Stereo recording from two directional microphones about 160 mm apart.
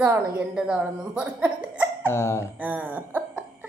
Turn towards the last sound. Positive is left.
turn(degrees=-10)  # may be behind; listen again after turning